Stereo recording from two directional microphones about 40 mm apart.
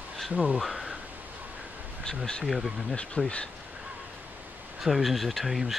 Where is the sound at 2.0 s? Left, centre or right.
Centre.